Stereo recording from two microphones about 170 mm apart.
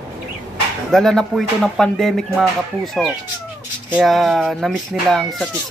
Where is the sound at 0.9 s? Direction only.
Centre (ahead or behind).